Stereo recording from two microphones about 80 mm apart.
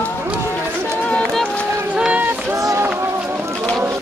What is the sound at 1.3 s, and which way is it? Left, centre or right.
Run, centre.